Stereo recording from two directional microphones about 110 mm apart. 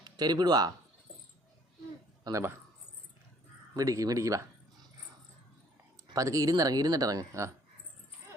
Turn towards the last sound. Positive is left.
turn(degrees=-30)  # may be behind; listen again after turning